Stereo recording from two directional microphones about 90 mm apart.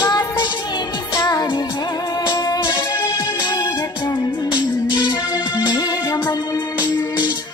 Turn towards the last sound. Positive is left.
turn(degrees=55)  # may be behind; listen again after turning